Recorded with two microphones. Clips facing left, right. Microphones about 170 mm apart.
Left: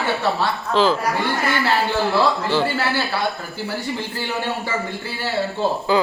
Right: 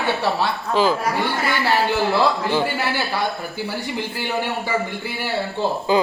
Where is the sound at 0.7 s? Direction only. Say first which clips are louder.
Left 1 dB; 10° right (ahead or behind).